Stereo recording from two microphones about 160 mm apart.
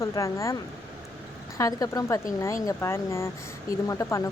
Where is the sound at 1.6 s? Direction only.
25° left (ahead or behind).